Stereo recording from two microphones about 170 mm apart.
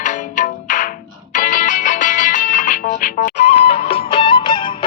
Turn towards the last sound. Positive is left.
turn(degrees=30)  # may be behind; listen again after turning